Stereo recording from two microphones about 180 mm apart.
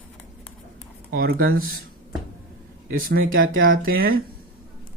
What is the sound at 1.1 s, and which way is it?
Speech, 55° right (ahead or behind).